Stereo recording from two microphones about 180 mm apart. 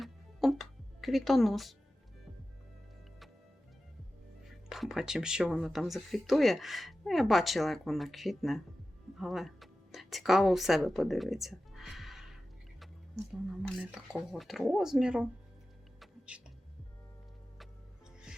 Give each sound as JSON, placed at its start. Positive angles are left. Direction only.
{"t": 0.0, "sound": "music", "side_deg": 0}
{"t": 4.4, "sound": "a woman's voice", "side_deg": 0}
{"t": 13.6, "sound": "speech", "side_deg": -5}
{"t": 16.0, "sound": "music", "side_deg": -5}